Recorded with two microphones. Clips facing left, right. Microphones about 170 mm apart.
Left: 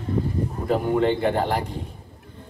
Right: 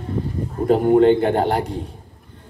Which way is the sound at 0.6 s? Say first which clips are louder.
Right 8 dB; 40° right (ahead or behind).